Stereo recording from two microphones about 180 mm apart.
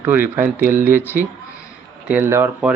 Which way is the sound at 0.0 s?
10° right (ahead or behind).